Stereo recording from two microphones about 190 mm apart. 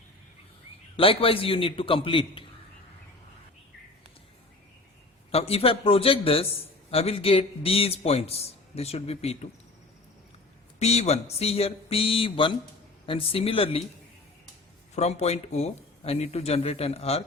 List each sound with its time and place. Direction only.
0.9 s a man's voice: 30° left (ahead or behind)
5.3 s a man's voice: 30° left (ahead or behind)
10.8 s a man's voice: 35° left (ahead or behind)
14.9 s a man's voice: 35° left (ahead or behind)